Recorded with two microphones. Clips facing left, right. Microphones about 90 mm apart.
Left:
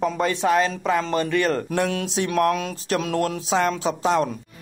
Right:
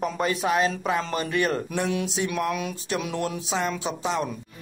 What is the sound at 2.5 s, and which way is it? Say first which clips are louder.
Speech: left 4 dB; 35° left (ahead or behind).